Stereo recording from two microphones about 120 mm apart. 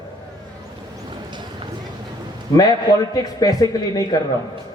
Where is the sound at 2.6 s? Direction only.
30° left (ahead or behind).